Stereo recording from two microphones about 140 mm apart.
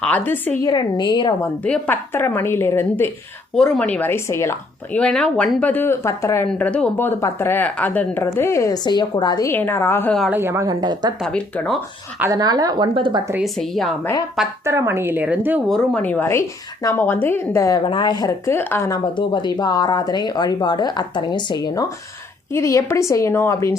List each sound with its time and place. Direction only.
0.0 s speech: 10° left (ahead or behind)
0.6 s speech: 30° left (ahead or behind)
1.6 s speech: 10° left (ahead or behind)
3.5 s speech: 5° left (ahead or behind)
4.9 s speech: 5° left (ahead or behind); by 9.5 s 30° left (ahead or behind)
9.5 s speech: 15° left (ahead or behind)
10.2 s a woman's voice: 15° right (ahead or behind)
11.2 s speech: 5° left (ahead or behind)
12.3 s speech: 30° right (ahead or behind)
13.4 s speech: centre (ahead or behind)
14.6 s speech: 20° right (ahead or behind)
15.7 s speech: 5° left (ahead or behind); by 17.8 s 25° left (ahead or behind)
17.8 s a woman's voice: 35° left (ahead or behind); by 18.9 s 15° left (ahead or behind)
18.9 s a woman's voice: 30° left (ahead or behind)